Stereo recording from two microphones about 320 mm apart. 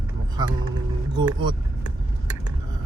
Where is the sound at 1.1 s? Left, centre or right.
Centre.